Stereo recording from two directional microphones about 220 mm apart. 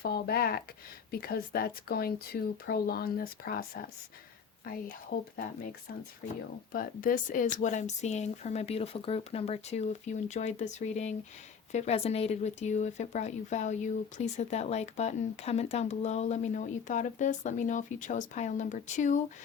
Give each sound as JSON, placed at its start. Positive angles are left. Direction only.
{"t": 0.0, "sound": "speech", "side_deg": 45}
{"t": 6.7, "sound": "speech", "side_deg": 40}